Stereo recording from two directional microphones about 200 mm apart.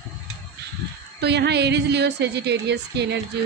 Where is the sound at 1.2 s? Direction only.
55° right (ahead or behind).